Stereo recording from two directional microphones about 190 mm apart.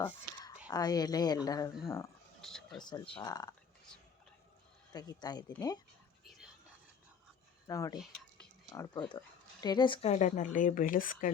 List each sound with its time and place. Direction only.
0.0 s speech: 20° left (ahead or behind)
2.4 s speech: centre (ahead or behind)
2.8 s speech: 25° left (ahead or behind)
4.9 s speech: 20° left (ahead or behind)
6.2 s whispering: centre (ahead or behind)
7.7 s speech: 20° left (ahead or behind)
9.0 s speech: 20° left (ahead or behind); by 11.3 s 45° left (ahead or behind)